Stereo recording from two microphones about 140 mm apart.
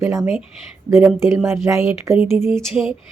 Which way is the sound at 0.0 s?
20° right (ahead or behind).